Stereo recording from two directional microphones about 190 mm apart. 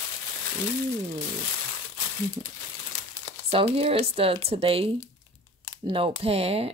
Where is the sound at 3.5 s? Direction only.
30° right (ahead or behind).